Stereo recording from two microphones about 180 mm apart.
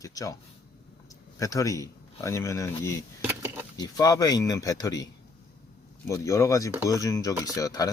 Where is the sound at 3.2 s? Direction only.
10° right (ahead or behind).